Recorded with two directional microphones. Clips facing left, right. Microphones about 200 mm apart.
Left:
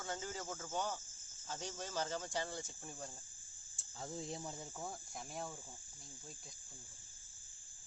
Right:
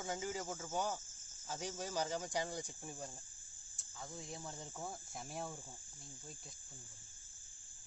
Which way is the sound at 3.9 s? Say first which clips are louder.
Left 4 dB; 30° left (ahead or behind).